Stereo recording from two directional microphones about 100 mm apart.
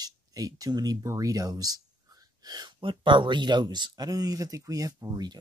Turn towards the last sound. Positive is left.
turn(degrees=-40)  # may be behind; listen again after turning